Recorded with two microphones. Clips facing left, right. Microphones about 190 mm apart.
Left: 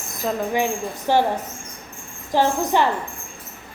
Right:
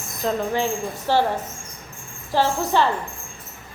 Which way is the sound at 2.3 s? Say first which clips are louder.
Left 2 dB; 15° left (ahead or behind).